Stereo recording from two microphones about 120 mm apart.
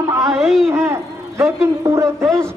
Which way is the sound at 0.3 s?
Centre (ahead or behind).